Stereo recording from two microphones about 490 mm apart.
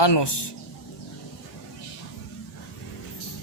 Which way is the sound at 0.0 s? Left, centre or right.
Left.